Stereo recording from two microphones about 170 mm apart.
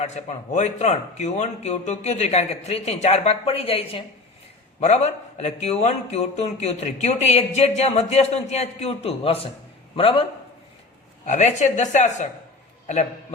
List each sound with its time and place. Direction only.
0.0 s a man's voice: 40° left (ahead or behind)
11.3 s a woman's voice: 45° left (ahead or behind)